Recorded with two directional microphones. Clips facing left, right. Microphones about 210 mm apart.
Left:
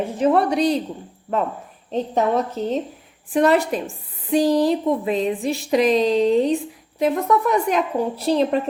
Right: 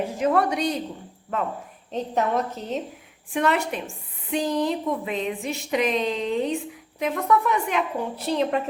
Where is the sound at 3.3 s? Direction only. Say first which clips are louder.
Left 6 dB; 35° left (ahead or behind).